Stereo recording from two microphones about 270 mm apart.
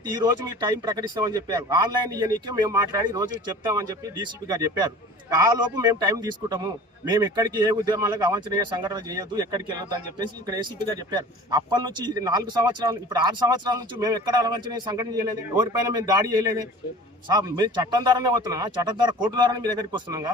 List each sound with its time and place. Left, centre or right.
0.0 s a man's voice: centre